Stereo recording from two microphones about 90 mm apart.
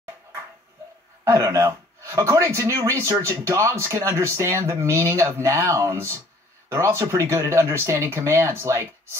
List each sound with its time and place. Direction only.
1.2 s speech: 35° right (ahead or behind)